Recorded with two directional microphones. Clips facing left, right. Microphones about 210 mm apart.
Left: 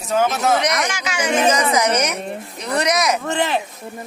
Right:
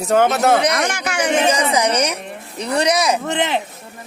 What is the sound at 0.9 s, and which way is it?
Speech, 60° right (ahead or behind).